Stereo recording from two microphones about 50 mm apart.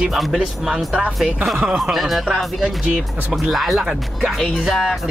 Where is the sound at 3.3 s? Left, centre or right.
Centre.